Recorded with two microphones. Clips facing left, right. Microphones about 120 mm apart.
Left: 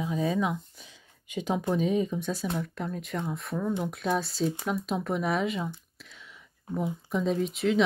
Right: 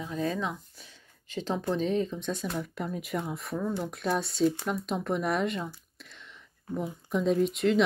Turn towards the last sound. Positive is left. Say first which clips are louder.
# right 2 dB
turn(degrees=0)  # may be behind; listen again after turning